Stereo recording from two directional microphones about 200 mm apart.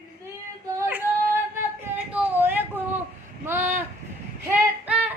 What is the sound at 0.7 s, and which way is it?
Yodeling, 10° right (ahead or behind).